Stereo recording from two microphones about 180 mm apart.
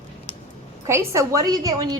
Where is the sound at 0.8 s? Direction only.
15° right (ahead or behind).